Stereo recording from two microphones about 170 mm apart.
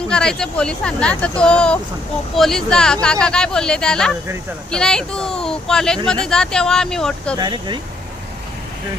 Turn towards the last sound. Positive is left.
turn(degrees=-25)  # may be behind; listen again after turning